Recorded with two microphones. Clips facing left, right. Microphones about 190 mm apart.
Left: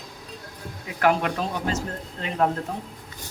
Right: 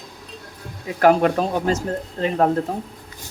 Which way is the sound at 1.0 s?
40° right (ahead or behind).